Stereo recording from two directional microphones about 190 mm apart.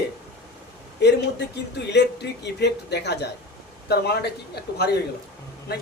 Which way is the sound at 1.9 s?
65° left (ahead or behind).